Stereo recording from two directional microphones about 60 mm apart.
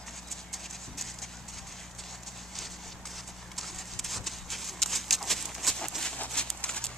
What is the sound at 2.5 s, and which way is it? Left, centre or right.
Clip-clop, centre.